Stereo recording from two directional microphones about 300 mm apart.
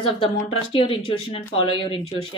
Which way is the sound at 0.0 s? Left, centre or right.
Centre.